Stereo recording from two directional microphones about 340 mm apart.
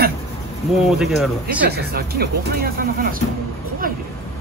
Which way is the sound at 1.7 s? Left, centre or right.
Right.